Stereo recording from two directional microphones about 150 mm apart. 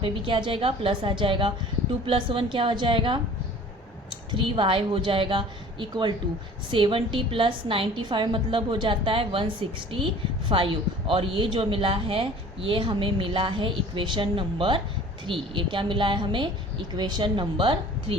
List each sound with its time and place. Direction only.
0.0 s speech: 35° right (ahead or behind)
4.3 s speech: 35° right (ahead or behind)